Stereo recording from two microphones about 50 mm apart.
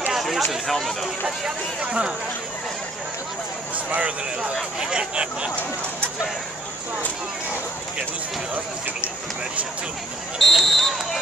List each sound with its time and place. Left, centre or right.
0.1 s a sound: centre
0.5 s speech: centre
1.2 s speech: centre
3.7 s speech: right
4.7 s speech: centre
10.4 s speech: centre